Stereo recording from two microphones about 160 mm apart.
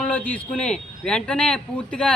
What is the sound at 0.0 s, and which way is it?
Speech, 10° left (ahead or behind).